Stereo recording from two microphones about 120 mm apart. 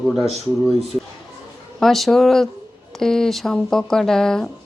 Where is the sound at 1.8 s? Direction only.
Centre (ahead or behind).